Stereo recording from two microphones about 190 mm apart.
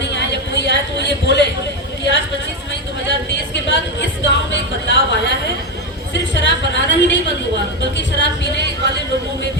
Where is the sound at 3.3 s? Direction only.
70° left (ahead or behind).